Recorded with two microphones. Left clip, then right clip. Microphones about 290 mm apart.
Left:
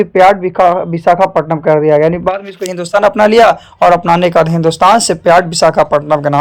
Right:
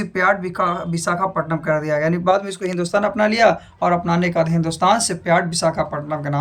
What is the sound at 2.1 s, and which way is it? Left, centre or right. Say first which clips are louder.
Speech: left 3 dB; centre.